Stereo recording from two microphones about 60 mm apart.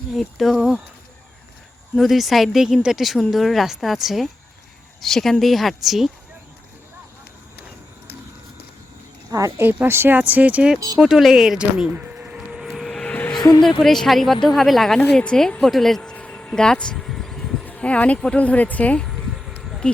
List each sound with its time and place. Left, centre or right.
0.1 s speech: centre
2.0 s speech: centre
9.6 s speech: right
10.2 s speech: right
10.8 s speech: right
11.0 s speech: centre
11.9 s a sound: right
12.7 s vehicle: centre
13.1 s a sound: left
13.7 s speech: centre
16.0 s a sound: centre
17.7 s speech: centre
19.0 s a sound: centre